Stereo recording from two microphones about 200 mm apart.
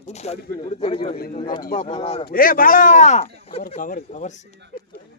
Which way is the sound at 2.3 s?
45° left (ahead or behind).